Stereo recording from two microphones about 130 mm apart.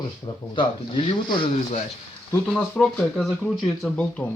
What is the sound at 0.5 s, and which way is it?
Speech, 40° left (ahead or behind).